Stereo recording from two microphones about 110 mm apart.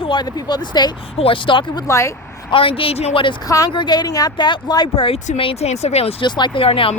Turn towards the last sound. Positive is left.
turn(degrees=60)  # may be behind; listen again after turning